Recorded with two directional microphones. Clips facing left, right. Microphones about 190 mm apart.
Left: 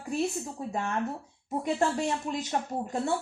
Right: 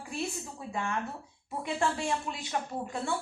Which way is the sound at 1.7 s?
40° left (ahead or behind).